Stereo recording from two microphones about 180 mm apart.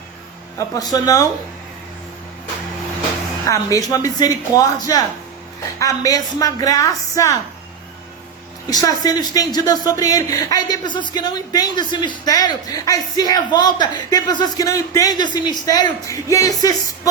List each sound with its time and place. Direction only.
0.8 s speech: 20° left (ahead or behind)
3.4 s speech: 20° left (ahead or behind)
8.7 s speech: 20° left (ahead or behind)